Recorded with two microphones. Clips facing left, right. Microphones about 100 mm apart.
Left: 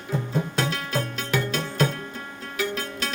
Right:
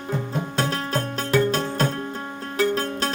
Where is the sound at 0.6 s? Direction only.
40° right (ahead or behind).